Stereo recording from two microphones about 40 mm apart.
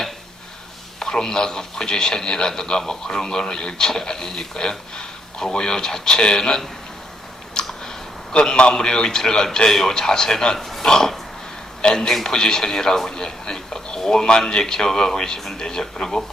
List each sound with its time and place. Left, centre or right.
0.9 s a man's voice: centre
7.6 s a sound: centre
8.3 s a man's voice: left